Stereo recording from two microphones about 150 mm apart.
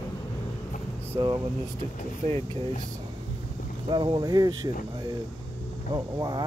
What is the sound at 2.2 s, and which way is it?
Speech, 40° right (ahead or behind).